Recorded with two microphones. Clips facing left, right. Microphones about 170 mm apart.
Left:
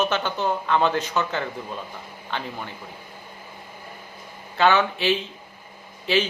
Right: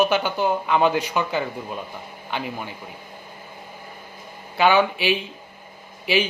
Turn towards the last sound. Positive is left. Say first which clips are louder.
# right 1 dB
turn(degrees=-10)  # may be behind; listen again after turning